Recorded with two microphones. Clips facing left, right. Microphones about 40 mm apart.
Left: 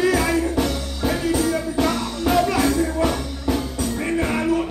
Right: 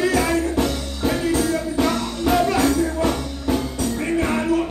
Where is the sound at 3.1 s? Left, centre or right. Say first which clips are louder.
Right 1 dB; centre.